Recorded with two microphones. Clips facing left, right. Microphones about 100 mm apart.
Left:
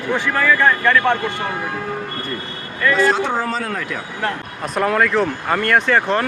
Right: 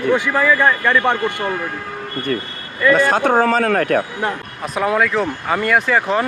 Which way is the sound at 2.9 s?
50° right (ahead or behind).